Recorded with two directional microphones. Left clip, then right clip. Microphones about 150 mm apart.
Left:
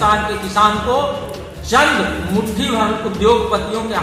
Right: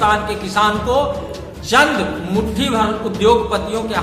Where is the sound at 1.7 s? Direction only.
40° right (ahead or behind).